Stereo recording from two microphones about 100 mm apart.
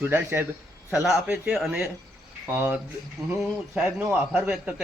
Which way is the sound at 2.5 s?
20° right (ahead or behind).